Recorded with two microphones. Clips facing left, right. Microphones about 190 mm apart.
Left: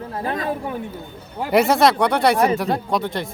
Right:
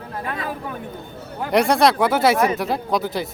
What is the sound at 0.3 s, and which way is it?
Speech, 30° left (ahead or behind).